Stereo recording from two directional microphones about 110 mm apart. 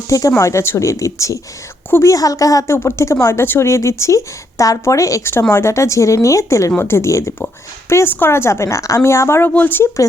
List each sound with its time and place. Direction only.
0.1 s a woman's voice: 30° left (ahead or behind)